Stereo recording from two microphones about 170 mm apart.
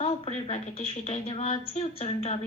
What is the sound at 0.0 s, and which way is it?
A woman's voice, 35° left (ahead or behind).